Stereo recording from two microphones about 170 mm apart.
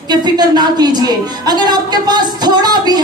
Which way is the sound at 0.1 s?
25° right (ahead or behind).